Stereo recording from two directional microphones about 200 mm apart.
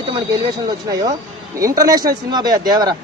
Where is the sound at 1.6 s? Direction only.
15° right (ahead or behind).